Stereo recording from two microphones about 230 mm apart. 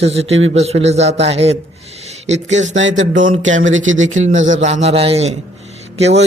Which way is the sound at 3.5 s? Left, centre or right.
Right.